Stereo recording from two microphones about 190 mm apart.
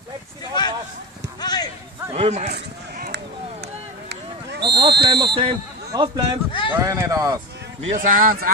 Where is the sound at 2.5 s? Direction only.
60° right (ahead or behind).